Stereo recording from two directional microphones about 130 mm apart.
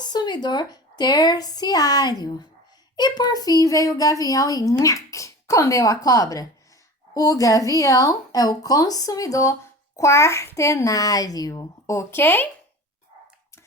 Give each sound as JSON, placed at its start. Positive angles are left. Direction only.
{"t": 0.0, "sound": "a woman's voice", "side_deg": 35}